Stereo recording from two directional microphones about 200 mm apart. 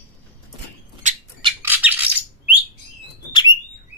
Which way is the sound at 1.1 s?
35° right (ahead or behind).